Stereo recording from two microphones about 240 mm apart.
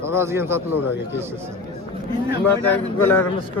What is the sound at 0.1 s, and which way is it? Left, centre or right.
Speech, centre.